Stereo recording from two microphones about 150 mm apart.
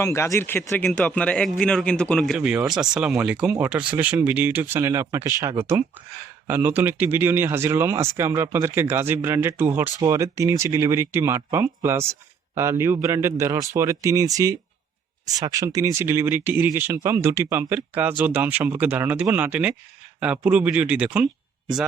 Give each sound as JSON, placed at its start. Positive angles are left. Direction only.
{"t": 0.0, "sound": "speech", "side_deg": 20}